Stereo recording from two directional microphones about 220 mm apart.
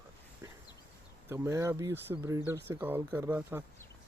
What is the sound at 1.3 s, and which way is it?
Speech, 10° right (ahead or behind).